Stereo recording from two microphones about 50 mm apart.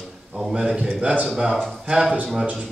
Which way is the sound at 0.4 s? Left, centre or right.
Centre.